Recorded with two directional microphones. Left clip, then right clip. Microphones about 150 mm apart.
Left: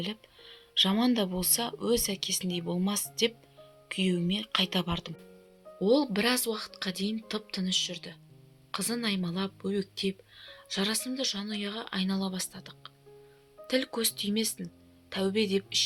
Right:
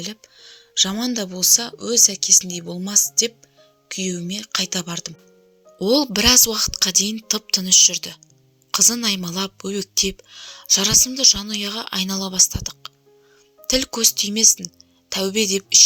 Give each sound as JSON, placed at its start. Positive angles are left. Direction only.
{"t": 0.0, "sound": "speech", "side_deg": -35}
{"t": 5.8, "sound": "speech", "side_deg": -60}